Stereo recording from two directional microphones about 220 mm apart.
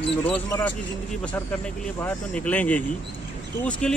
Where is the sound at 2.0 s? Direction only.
5° left (ahead or behind).